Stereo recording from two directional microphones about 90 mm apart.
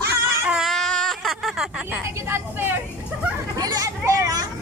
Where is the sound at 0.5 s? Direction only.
5° right (ahead or behind).